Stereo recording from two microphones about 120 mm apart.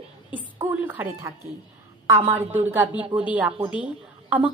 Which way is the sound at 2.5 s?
15° right (ahead or behind).